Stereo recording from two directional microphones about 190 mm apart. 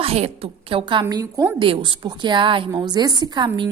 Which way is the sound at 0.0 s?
30° right (ahead or behind).